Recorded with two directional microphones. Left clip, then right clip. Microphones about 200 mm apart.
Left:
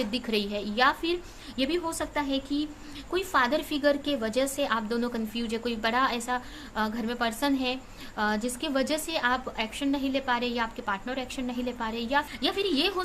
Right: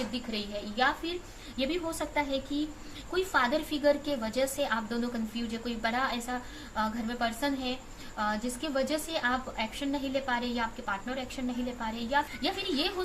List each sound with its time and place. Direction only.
0.1 s a woman's voice: 55° left (ahead or behind)